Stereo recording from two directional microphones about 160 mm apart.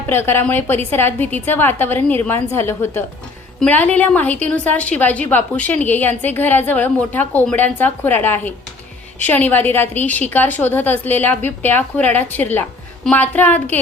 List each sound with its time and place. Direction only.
0.1 s a woman's voice: 15° left (ahead or behind)